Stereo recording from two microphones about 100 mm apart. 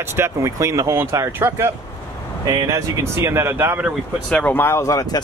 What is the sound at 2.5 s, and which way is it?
Speech, 35° right (ahead or behind).